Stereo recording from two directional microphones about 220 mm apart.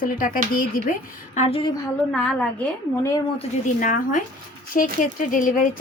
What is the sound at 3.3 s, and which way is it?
A woman's voice, 35° left (ahead or behind).